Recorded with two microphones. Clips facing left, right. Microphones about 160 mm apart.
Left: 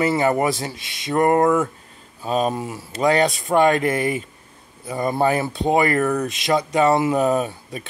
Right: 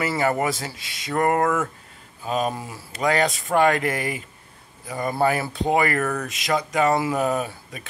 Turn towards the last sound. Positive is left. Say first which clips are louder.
# left 4 dB
turn(degrees=25)  # may be behind; listen again after turning